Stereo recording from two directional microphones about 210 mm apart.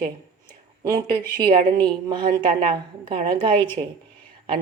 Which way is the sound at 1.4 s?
20° right (ahead or behind).